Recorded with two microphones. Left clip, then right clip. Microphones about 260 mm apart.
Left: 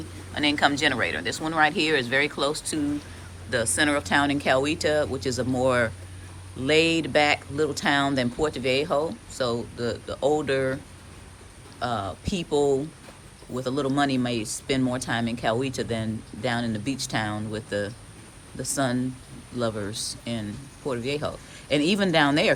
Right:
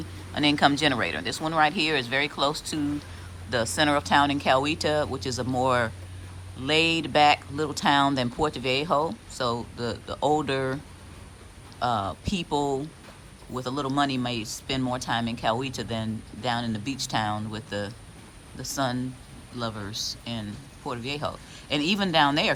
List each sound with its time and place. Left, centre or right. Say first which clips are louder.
0.3 s speech: even; centre
11.8 s speech: right 2 dB; centre